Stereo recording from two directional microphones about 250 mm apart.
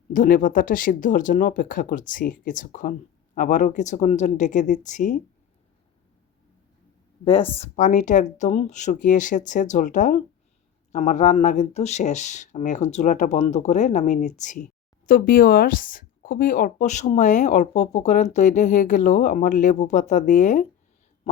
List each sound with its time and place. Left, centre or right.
0.1 s speech: left
7.3 s speech: left